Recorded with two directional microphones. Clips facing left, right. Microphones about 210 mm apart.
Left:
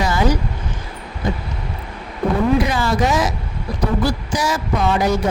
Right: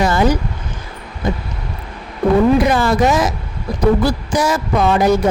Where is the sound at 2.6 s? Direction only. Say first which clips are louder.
Right 5 dB; 55° right (ahead or behind).